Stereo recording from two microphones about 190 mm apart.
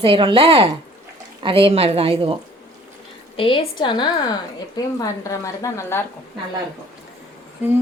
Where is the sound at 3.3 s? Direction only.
25° left (ahead or behind).